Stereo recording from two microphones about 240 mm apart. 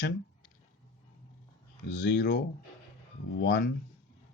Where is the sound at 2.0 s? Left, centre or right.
Left.